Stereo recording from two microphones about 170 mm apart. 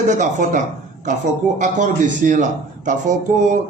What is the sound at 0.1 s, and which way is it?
Speech, 45° right (ahead or behind).